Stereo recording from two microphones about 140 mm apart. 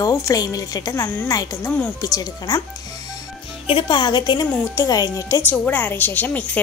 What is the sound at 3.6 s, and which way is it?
A woman's voice, 35° left (ahead or behind).